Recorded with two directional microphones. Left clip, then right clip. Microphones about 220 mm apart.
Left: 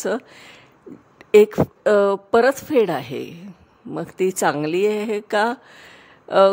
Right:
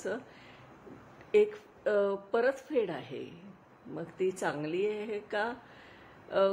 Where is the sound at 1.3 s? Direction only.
50° left (ahead or behind).